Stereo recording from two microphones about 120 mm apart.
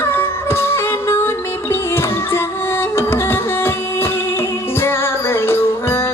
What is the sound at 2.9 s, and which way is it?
Music, 20° left (ahead or behind).